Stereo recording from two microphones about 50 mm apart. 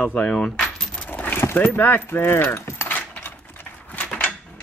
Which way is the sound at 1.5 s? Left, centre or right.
Left.